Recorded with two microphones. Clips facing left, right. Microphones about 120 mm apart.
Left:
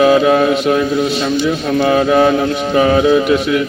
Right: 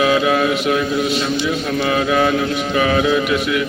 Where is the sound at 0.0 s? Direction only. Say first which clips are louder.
Left 5 dB; 40° left (ahead or behind).